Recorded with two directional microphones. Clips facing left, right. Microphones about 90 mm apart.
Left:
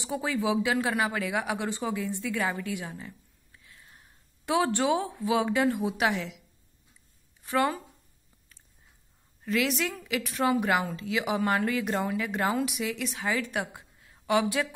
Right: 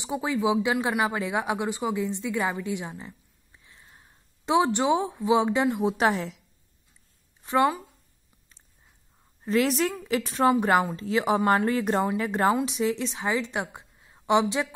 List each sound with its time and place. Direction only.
0.0 s speech: 20° right (ahead or behind); by 6.4 s 35° right (ahead or behind)
7.4 s speech: 20° right (ahead or behind)
9.4 s a woman's voice: 35° right (ahead or behind)